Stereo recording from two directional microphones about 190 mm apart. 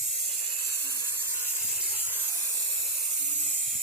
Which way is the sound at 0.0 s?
35° right (ahead or behind).